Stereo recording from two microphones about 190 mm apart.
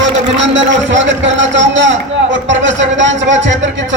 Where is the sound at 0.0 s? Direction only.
75° right (ahead or behind).